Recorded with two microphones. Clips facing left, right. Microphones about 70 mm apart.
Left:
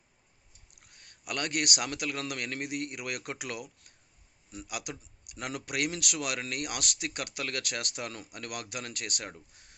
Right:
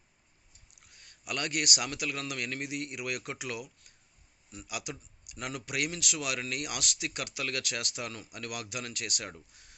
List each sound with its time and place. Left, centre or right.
0.9 s speech: left